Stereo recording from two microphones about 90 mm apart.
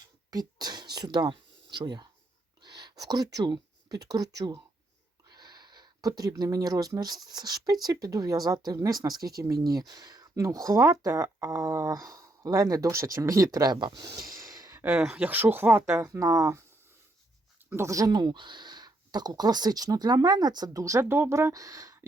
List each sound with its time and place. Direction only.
0.3 s speech: 50° right (ahead or behind)
13.7 s speech: 60° right (ahead or behind)
14.0 s sigh: 40° right (ahead or behind)
14.8 s speech: 10° right (ahead or behind); by 16.6 s 40° right (ahead or behind)
17.7 s speech: 30° right (ahead or behind)
18.1 s speech: 55° right (ahead or behind)
20.8 s speech: 30° right (ahead or behind)